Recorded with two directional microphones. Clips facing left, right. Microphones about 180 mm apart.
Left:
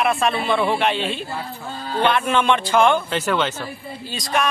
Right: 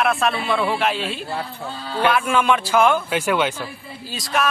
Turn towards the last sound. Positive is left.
turn(degrees=-5)  # may be behind; listen again after turning